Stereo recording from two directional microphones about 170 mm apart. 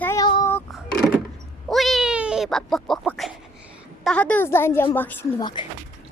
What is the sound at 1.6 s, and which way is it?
A woman's voice, centre (ahead or behind).